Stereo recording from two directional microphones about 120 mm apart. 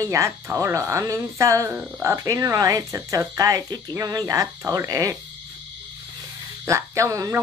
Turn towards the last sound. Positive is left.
turn(degrees=-25)  # may be behind; listen again after turning